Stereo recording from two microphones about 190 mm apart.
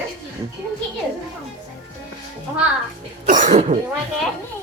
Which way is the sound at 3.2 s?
40° right (ahead or behind).